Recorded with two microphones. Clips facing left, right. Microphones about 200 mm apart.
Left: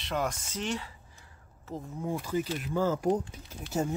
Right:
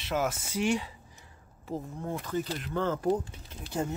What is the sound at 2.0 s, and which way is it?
Speech, 10° left (ahead or behind).